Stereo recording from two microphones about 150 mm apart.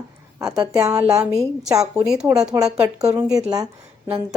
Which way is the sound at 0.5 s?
25° right (ahead or behind).